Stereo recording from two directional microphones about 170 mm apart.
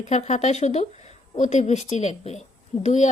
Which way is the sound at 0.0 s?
40° left (ahead or behind).